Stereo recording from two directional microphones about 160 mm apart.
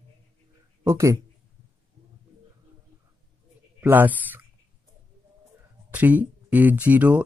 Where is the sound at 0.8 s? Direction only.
15° right (ahead or behind).